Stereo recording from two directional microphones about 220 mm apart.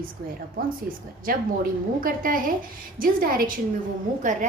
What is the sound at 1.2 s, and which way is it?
A woman's voice, 40° right (ahead or behind).